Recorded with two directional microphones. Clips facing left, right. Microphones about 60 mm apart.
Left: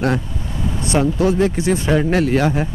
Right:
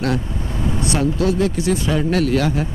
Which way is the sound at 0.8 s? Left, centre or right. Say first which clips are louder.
Left 3 dB; left.